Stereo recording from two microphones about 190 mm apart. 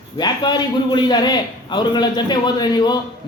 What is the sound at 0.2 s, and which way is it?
A man's voice, 20° left (ahead or behind).